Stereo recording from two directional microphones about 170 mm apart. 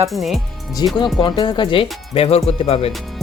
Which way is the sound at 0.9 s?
25° left (ahead or behind).